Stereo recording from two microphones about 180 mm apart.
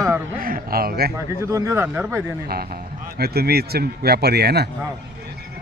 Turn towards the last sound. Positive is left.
turn(degrees=-65)  # may be behind; listen again after turning